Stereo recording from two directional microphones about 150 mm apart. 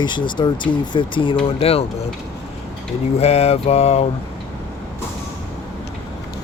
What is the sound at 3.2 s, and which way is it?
Mantra, 45° left (ahead or behind).